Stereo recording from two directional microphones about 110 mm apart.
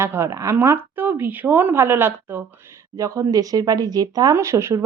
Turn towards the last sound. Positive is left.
turn(degrees=-25)  # may be behind; listen again after turning